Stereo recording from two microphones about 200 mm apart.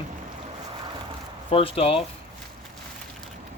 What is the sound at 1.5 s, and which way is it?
Speech, 30° left (ahead or behind).